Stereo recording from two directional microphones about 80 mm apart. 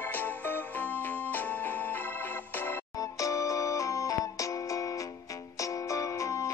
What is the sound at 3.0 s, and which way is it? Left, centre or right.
Music, left.